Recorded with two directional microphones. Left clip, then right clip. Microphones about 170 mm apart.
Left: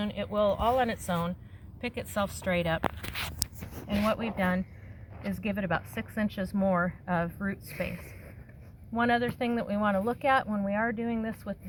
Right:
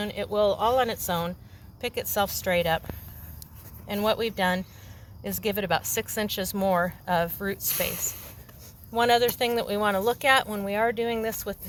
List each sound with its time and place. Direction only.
0.0 s a woman's voice: 40° right (ahead or behind)
3.8 s a woman's voice: 55° right (ahead or behind)